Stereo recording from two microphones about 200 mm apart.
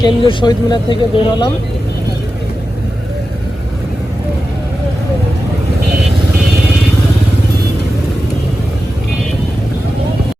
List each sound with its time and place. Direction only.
0.0 s speech: 25° left (ahead or behind)